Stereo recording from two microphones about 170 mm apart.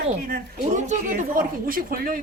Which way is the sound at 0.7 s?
45° right (ahead or behind).